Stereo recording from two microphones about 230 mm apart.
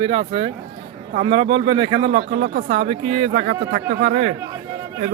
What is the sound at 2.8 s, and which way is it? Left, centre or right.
Speech, right.